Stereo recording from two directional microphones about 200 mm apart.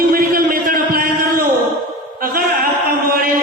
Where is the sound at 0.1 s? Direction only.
45° right (ahead or behind).